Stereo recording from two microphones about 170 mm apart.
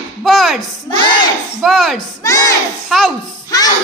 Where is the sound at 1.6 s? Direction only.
Centre (ahead or behind).